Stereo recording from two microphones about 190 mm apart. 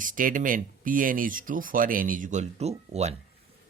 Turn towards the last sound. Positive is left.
turn(degrees=-35)  # may be behind; listen again after turning